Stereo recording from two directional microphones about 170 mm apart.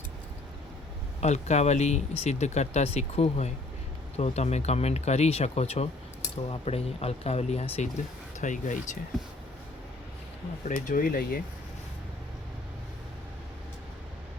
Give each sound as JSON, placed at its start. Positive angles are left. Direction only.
{"t": 1.2, "sound": "speech", "side_deg": 40}
{"t": 8.4, "sound": "speech", "side_deg": 50}
{"t": 10.6, "sound": "speech", "side_deg": 50}